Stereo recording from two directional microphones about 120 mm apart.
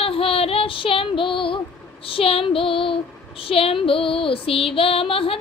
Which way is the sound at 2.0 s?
50° left (ahead or behind).